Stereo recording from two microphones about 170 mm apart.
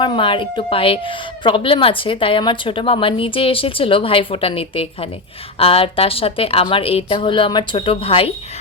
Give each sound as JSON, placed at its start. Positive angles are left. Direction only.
{"t": 0.0, "sound": "speech", "side_deg": 30}